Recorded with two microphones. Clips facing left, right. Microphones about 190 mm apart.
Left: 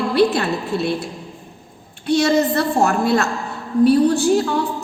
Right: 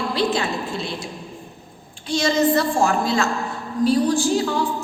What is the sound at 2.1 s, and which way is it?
A woman's voice, 60° left (ahead or behind).